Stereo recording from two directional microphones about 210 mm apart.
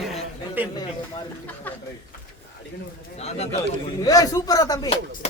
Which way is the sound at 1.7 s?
10° left (ahead or behind).